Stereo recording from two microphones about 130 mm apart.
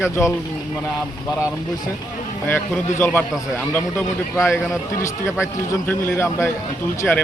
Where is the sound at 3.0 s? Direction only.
15° left (ahead or behind).